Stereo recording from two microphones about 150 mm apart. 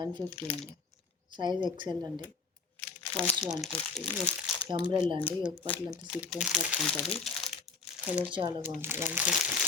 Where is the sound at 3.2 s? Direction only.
5° left (ahead or behind).